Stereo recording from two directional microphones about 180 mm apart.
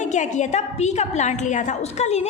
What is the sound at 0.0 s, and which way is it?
A woman's voice, 40° left (ahead or behind).